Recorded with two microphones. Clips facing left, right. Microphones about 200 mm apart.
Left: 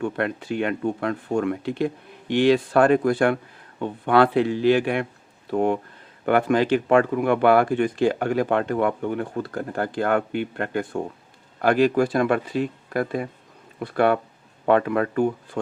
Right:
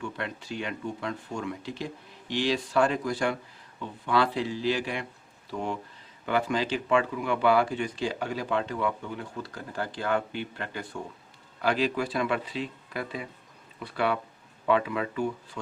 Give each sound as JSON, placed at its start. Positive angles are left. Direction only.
{"t": 0.0, "sound": "speech", "side_deg": 55}